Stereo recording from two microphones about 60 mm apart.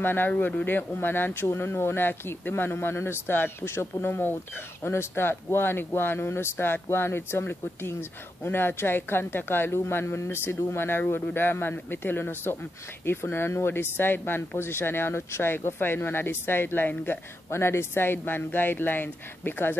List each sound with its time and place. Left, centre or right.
0.0 s speech: left